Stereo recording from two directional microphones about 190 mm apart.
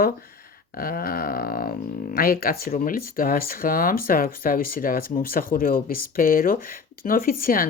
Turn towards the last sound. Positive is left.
turn(degrees=50)  # may be behind; listen again after turning